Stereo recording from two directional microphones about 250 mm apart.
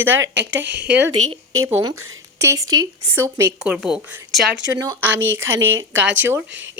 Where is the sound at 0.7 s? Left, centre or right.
Right.